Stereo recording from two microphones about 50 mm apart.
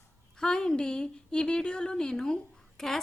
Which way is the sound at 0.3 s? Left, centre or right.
Centre.